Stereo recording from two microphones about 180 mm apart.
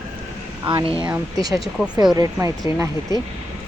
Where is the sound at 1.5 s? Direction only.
5° right (ahead or behind).